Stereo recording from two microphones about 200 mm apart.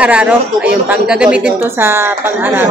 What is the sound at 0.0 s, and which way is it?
A woman's voice, 5° right (ahead or behind).